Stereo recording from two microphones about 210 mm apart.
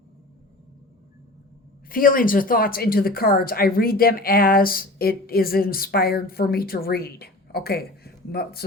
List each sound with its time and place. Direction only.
1.9 s a woman's voice: 40° left (ahead or behind)